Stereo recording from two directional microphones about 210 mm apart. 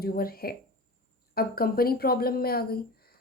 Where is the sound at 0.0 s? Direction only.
45° left (ahead or behind).